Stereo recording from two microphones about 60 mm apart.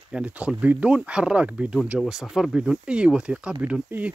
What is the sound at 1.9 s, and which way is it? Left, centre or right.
Speech, centre.